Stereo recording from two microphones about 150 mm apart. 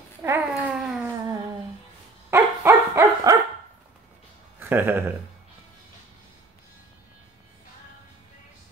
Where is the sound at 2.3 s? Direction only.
15° right (ahead or behind).